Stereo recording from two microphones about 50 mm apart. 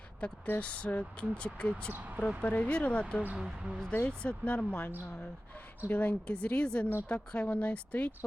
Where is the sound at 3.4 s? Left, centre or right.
Centre.